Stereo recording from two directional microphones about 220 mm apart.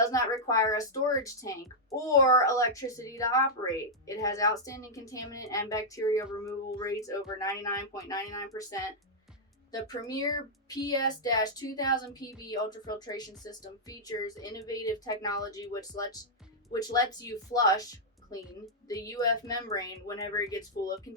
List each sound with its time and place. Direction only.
0.0 s speech: 15° left (ahead or behind)